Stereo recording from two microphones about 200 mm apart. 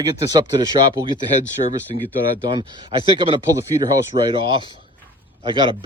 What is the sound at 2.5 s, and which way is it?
Speech, 25° right (ahead or behind).